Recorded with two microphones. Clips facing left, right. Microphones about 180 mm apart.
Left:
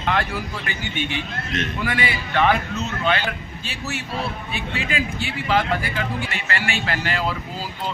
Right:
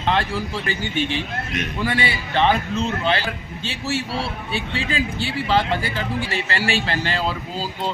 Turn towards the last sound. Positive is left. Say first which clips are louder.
# right 2 dB
turn(degrees=-30)  # may be behind; listen again after turning